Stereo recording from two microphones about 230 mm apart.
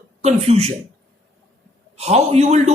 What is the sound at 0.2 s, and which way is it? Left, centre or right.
Speech, right.